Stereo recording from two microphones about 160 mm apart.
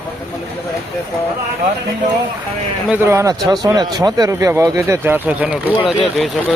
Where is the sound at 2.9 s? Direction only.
15° right (ahead or behind).